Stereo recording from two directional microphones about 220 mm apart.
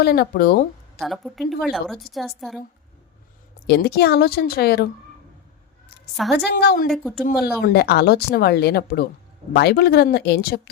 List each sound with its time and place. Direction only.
0.0 s a woman's voice: 45° left (ahead or behind)
0.9 s a woman's voice: centre (ahead or behind)
3.7 s a woman's voice: 45° left (ahead or behind)
6.3 s a woman's voice: 45° left (ahead or behind)
6.8 s a woman's voice: centre (ahead or behind)
7.2 s a woman's voice: 45° left (ahead or behind)